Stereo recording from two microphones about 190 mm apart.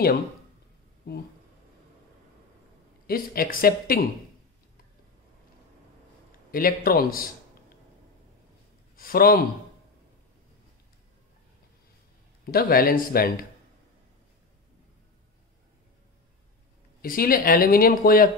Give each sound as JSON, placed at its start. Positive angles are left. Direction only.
{"t": 1.0, "sound": "speech", "side_deg": 55}
{"t": 3.1, "sound": "speech", "side_deg": 50}
{"t": 6.5, "sound": "speech", "side_deg": 50}
{"t": 8.9, "sound": "a man's voice", "side_deg": 50}
{"t": 12.4, "sound": "speech", "side_deg": 50}
{"t": 17.0, "sound": "speech", "side_deg": 50}